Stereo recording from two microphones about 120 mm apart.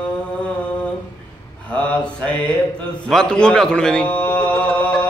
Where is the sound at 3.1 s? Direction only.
5° left (ahead or behind).